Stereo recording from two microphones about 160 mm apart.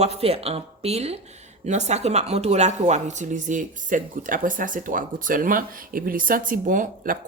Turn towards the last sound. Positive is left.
turn(degrees=-60)  # may be behind; listen again after turning